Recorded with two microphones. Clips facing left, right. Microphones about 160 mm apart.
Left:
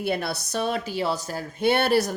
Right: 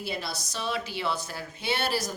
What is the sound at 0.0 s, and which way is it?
Speech, 60° left (ahead or behind).